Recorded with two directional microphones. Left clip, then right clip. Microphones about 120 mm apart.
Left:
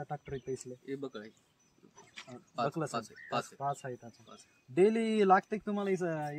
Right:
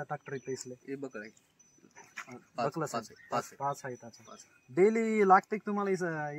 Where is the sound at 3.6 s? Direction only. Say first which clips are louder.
Right 1 dB; 25° left (ahead or behind).